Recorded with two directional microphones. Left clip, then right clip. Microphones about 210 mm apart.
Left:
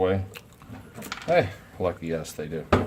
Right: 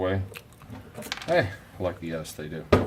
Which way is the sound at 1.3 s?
35° left (ahead or behind).